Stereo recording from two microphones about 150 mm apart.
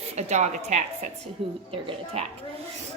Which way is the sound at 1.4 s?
40° right (ahead or behind).